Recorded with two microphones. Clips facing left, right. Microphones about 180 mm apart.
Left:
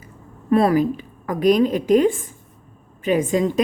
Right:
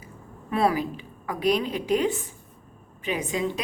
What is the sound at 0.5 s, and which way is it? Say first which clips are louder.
A woman's voice: left 8 dB; 45° left (ahead or behind).